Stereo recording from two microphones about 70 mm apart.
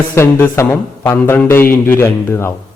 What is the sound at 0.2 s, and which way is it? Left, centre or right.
A man's voice, left.